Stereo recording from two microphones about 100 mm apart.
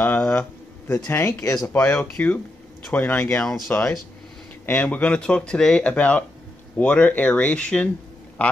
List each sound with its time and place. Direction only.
0.0 s a sound: 20° left (ahead or behind)
1.5 s speech: 15° left (ahead or behind)
8.4 s quack: 10° left (ahead or behind)